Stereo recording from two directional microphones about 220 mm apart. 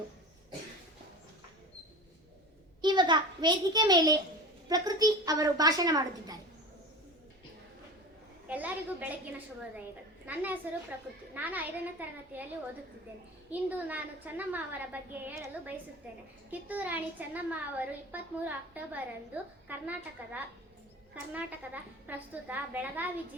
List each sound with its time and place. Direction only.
2.8 s a child's voice: 20° right (ahead or behind)
8.4 s a woman's voice: 5° right (ahead or behind)
10.2 s a woman's voice: 5° right (ahead or behind)
13.5 s a woman's voice: 5° right (ahead or behind)